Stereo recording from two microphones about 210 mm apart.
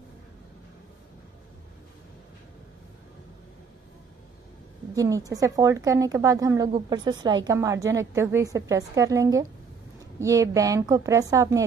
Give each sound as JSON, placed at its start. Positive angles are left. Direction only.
{"t": 4.9, "sound": "a woman's voice", "side_deg": -15}